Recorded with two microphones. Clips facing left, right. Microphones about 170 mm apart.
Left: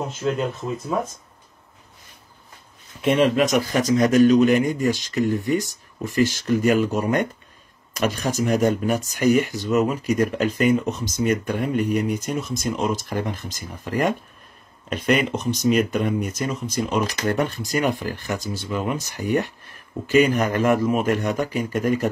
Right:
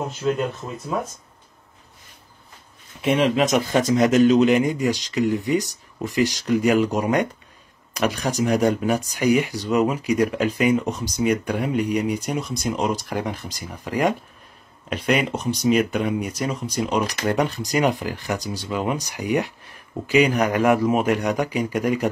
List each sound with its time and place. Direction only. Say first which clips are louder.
0.2 s speech: right 1 dB; centre (ahead or behind)
3.4 s a man's voice: right 1 dB; 25° right (ahead or behind)